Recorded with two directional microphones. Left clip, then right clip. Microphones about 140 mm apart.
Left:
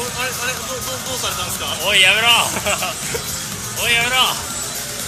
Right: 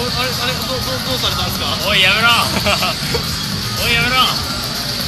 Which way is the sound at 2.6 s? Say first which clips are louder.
Right 5 dB; 5° left (ahead or behind).